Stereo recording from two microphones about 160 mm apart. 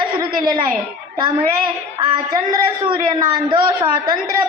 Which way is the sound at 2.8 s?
30° right (ahead or behind).